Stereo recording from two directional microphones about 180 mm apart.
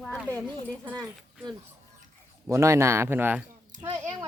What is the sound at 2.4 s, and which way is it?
Speech, 15° right (ahead or behind).